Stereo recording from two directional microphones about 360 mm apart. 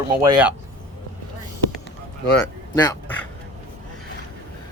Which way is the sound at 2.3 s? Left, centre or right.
Centre.